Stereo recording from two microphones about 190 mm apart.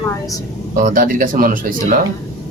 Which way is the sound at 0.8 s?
45° right (ahead or behind).